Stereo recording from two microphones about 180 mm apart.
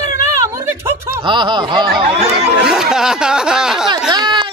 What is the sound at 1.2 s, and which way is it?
Speech, 25° right (ahead or behind).